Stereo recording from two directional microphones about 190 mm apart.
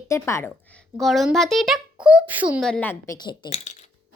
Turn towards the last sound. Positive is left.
turn(degrees=25)  # may be behind; listen again after turning